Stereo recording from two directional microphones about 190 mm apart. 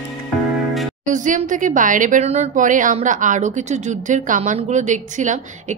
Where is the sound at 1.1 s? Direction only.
40° right (ahead or behind).